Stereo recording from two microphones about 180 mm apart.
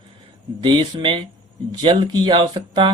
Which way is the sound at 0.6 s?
25° right (ahead or behind).